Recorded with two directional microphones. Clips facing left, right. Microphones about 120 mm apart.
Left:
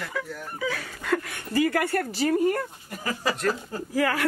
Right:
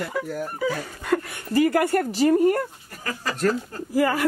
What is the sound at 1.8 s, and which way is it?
Speech, 20° right (ahead or behind).